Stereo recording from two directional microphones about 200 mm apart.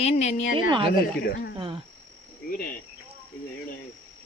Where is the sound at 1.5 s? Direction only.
25° right (ahead or behind).